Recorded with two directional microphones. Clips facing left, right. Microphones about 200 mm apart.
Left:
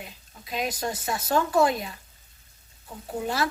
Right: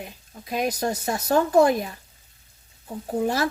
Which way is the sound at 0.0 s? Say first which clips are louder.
Right 5 dB; 45° right (ahead or behind).